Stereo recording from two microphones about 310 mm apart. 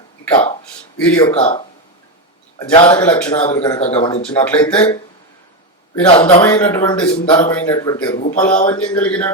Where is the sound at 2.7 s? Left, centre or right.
Centre.